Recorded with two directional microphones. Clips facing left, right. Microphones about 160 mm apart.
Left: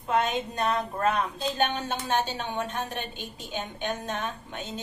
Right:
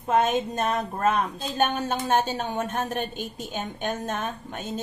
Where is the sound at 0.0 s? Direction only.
45° right (ahead or behind).